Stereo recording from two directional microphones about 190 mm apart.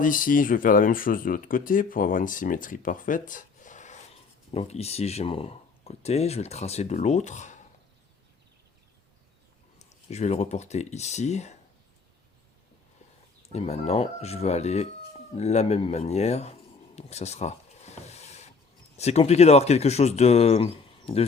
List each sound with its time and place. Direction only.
0.0 s speech: 45° left (ahead or behind)
9.7 s speech: 35° left (ahead or behind)
13.5 s speech: 35° left (ahead or behind)
15.4 s a sound: 35° left (ahead or behind)
18.9 s speech: 35° left (ahead or behind)